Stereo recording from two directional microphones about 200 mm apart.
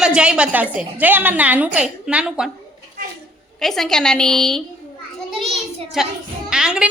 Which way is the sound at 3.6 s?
Centre (ahead or behind).